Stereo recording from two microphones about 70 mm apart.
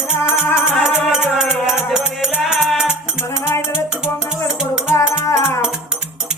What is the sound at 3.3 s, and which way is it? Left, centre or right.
Music, left.